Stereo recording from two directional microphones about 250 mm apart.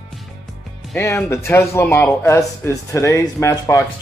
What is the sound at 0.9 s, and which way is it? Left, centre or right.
Speech, centre.